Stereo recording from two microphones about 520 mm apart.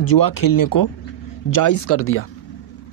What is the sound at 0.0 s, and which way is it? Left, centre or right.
A man's voice, left.